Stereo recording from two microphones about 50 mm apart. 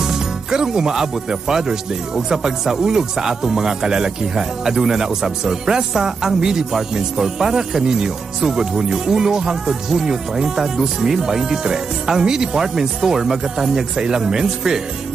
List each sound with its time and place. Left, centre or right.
0.0 s speech: centre